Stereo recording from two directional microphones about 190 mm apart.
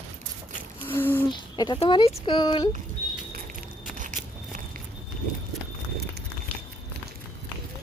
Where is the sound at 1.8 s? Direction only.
30° left (ahead or behind).